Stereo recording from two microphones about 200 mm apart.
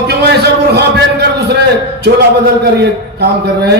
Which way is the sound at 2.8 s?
55° right (ahead or behind).